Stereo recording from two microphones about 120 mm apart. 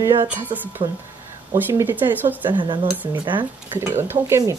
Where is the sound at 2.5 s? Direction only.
45° right (ahead or behind).